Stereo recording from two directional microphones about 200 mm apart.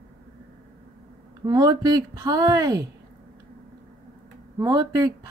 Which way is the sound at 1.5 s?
20° right (ahead or behind).